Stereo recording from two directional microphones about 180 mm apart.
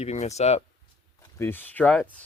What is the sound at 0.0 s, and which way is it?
Speech, 40° left (ahead or behind).